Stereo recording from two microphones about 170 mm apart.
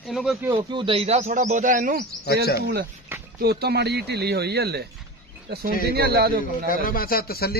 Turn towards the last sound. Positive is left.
turn(degrees=65)  # may be behind; listen again after turning